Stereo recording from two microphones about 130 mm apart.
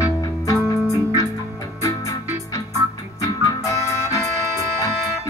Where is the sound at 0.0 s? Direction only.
25° left (ahead or behind).